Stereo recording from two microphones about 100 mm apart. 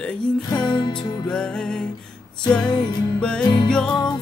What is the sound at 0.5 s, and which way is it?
Music, 50° left (ahead or behind).